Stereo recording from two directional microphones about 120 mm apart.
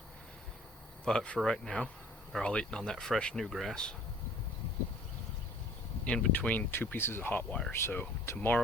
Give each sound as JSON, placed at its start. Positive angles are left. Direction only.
{"t": 1.0, "sound": "speech", "side_deg": 5}
{"t": 6.1, "sound": "speech", "side_deg": 10}